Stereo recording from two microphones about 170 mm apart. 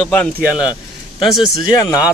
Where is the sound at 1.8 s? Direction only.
20° left (ahead or behind).